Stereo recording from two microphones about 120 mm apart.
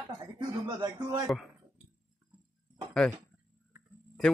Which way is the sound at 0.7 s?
35° right (ahead or behind).